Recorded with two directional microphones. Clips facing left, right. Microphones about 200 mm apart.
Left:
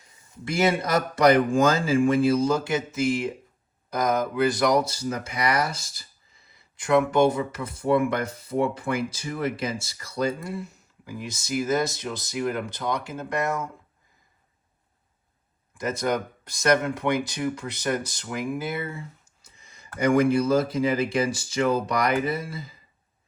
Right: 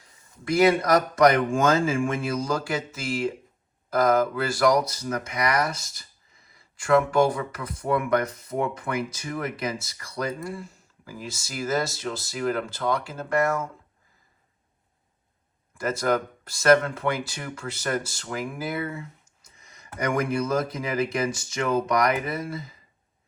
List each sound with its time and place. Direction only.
0.6 s speech: 25° left (ahead or behind)
15.7 s speech: 20° left (ahead or behind)